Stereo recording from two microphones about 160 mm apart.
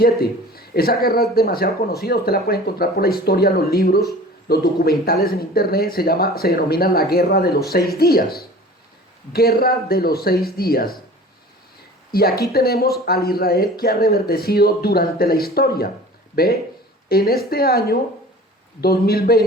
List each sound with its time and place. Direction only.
0.0 s speech: 70° left (ahead or behind)
12.1 s speech: 75° left (ahead or behind)